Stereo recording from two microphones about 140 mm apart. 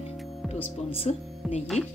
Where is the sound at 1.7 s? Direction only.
50° left (ahead or behind).